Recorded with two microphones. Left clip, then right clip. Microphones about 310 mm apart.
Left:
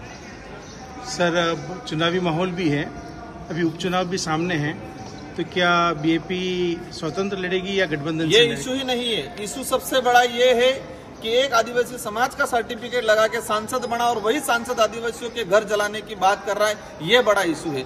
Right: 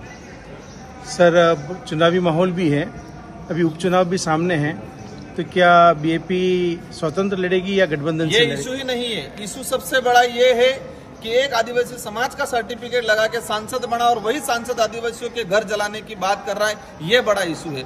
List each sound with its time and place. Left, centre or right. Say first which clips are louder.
1.1 s speech: right 7 dB; centre
8.3 s a man's voice: left 2 dB; centre